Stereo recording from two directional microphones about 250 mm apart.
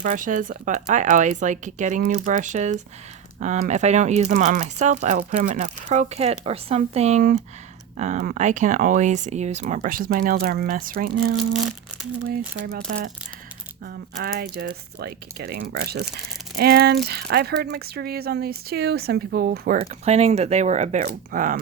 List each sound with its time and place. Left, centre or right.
0.0 s speech: right
12.6 s speech: right